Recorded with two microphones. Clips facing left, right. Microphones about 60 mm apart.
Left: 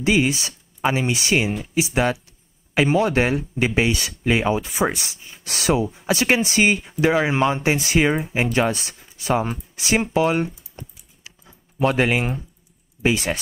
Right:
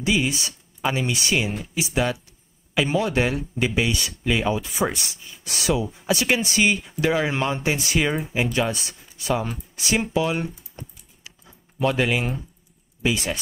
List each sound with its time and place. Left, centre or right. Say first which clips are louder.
0.0 s speech: left 4 dB; left
8.5 s speech: left 3 dB; left
11.8 s speech: left 3 dB; left